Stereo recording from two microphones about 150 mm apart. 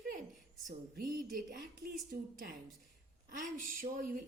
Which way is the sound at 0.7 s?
75° right (ahead or behind).